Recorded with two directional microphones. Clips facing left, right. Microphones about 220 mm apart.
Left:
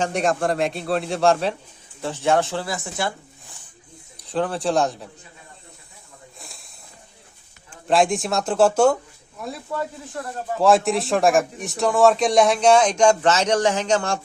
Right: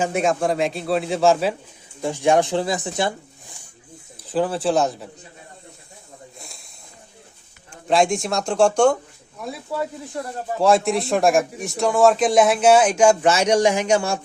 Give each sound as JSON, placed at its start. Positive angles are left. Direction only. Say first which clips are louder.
{"t": 0.0, "sound": "a man's voice", "louder": "right 1 dB", "side_deg": 0}
{"t": 4.2, "sound": "a man's voice", "louder": "right 2 dB", "side_deg": 0}
{"t": 6.4, "sound": "snake", "louder": "right 1 dB", "side_deg": 0}
{"t": 7.7, "sound": "a man's voice", "louder": "even", "side_deg": 0}
{"t": 10.2, "sound": "speech", "louder": "right 2 dB", "side_deg": -15}
{"t": 10.6, "sound": "a man's voice", "louder": "even", "side_deg": 0}